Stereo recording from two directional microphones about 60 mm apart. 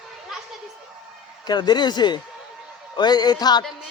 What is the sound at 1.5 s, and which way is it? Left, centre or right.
Speech, left.